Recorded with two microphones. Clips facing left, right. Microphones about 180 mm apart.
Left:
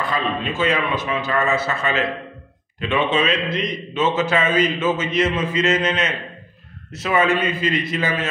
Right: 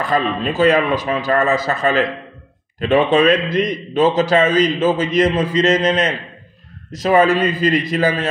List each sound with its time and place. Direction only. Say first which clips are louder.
0.1 s a man's voice: right 5 dB; 40° right (ahead or behind)